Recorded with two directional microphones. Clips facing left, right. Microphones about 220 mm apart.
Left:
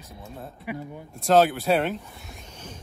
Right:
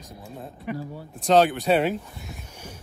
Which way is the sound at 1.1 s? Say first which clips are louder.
Even; centre (ahead or behind).